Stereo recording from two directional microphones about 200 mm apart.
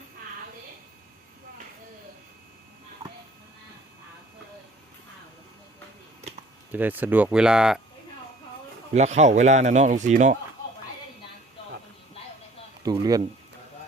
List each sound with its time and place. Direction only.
6.7 s speech: 10° right (ahead or behind)
8.9 s a man's voice: 35° right (ahead or behind)
12.8 s speech: 20° right (ahead or behind)